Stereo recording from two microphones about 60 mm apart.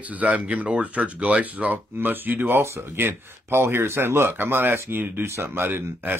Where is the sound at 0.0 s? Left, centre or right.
Right.